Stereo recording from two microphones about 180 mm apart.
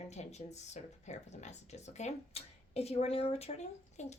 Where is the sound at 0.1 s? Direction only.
40° left (ahead or behind).